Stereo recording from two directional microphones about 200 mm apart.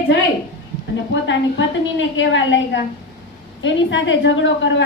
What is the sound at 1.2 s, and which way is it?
A woman's voice, 65° left (ahead or behind).